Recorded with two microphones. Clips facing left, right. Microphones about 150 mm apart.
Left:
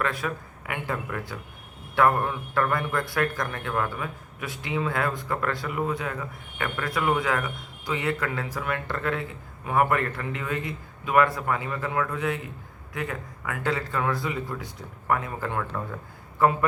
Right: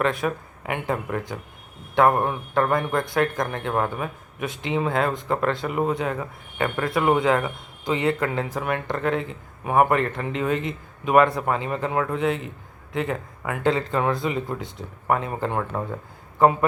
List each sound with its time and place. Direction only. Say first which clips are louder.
0.0 s speech: right 5 dB; 25° right (ahead or behind)
0.9 s speech: right 4 dB; 35° right (ahead or behind)
2.0 s a man's voice: right 3 dB; 25° right (ahead or behind)